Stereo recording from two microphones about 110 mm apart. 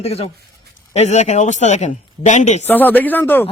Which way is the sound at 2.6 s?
15° left (ahead or behind).